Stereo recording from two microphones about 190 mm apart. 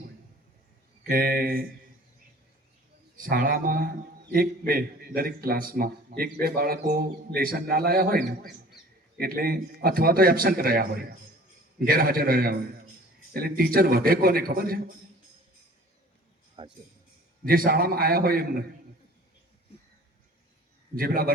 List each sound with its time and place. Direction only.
1.0 s a man's voice: 50° right (ahead or behind)
3.2 s a man's voice: 45° right (ahead or behind)
11.9 s a man's voice: 50° right (ahead or behind)
16.6 s speech: 25° right (ahead or behind)
17.4 s a man's voice: 50° right (ahead or behind)
20.9 s a man's voice: 50° right (ahead or behind)